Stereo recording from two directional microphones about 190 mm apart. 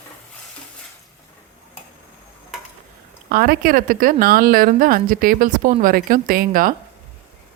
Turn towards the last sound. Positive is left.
turn(degrees=-50)  # may be behind; listen again after turning